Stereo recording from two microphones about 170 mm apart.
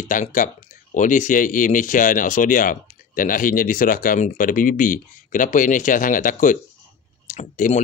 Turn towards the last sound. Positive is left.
turn(degrees=45)  # may be behind; listen again after turning